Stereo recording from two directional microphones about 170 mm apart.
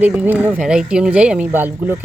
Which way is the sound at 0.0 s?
10° right (ahead or behind).